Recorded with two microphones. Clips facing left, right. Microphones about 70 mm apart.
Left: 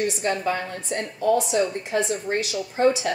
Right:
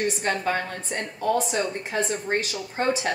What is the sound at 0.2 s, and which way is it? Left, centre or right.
A woman's voice, right.